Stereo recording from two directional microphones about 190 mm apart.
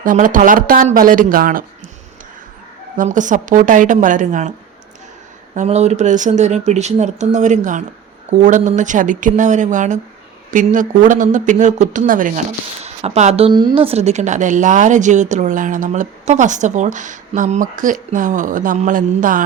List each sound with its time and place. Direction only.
0.0 s speech: 45° right (ahead or behind)
3.0 s speech: 40° right (ahead or behind)
5.5 s a woman's voice: 35° right (ahead or behind)
12.8 s a woman's voice: 35° right (ahead or behind)